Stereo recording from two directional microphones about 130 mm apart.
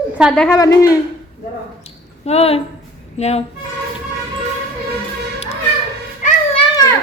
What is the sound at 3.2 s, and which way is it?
Speech, 55° left (ahead or behind).